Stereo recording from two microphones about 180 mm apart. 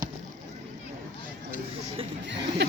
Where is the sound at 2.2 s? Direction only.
75° right (ahead or behind).